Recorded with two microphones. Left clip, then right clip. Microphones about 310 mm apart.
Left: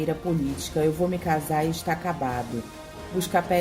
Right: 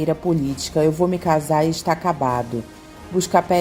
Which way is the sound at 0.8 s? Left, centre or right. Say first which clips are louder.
Right 6 dB; centre.